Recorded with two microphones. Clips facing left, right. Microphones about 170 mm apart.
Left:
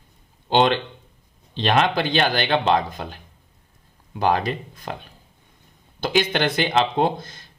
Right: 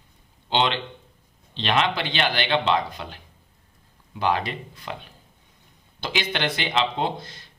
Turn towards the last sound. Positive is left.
turn(degrees=50)  # may be behind; listen again after turning